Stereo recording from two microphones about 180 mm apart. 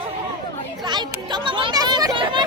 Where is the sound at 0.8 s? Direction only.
25° right (ahead or behind).